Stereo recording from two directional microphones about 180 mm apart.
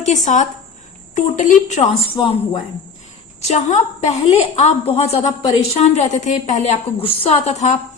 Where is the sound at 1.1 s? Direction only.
45° left (ahead or behind).